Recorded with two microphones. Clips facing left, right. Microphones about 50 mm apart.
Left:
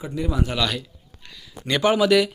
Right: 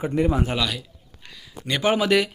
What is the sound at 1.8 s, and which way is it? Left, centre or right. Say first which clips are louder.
Speech: left 2 dB; right.